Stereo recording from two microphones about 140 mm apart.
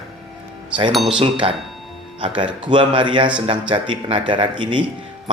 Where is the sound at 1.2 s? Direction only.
40° right (ahead or behind).